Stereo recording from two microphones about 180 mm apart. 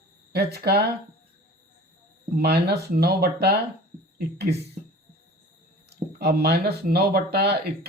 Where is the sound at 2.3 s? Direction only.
65° right (ahead or behind).